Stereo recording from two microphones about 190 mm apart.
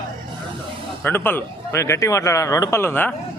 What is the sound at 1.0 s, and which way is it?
A man's voice, 10° left (ahead or behind).